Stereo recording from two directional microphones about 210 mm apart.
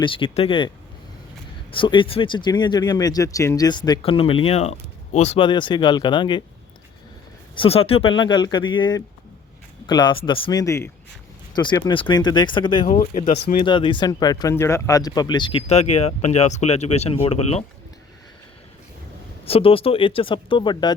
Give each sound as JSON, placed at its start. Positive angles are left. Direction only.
{"t": 0.0, "sound": "speech", "side_deg": 25}
{"t": 1.7, "sound": "speech", "side_deg": 25}
{"t": 7.5, "sound": "speech", "side_deg": 25}
{"t": 12.8, "sound": "speech", "side_deg": 35}
{"t": 13.7, "sound": "speech", "side_deg": 25}
{"t": 19.5, "sound": "speech", "side_deg": 25}